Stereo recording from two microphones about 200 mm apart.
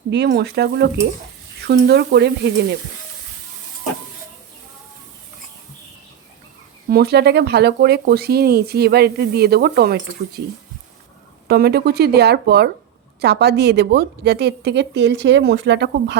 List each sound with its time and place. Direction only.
0.1 s a woman's voice: 55° right (ahead or behind)
6.9 s speech: 55° right (ahead or behind)
11.4 s a woman's voice: 50° right (ahead or behind)